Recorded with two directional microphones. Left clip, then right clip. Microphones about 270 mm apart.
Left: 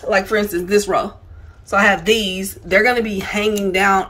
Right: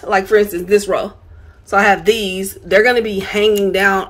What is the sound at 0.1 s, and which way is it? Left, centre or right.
A woman's voice, centre.